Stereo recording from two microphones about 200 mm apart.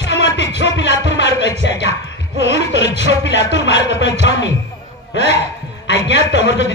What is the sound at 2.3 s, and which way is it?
Speech, 65° left (ahead or behind).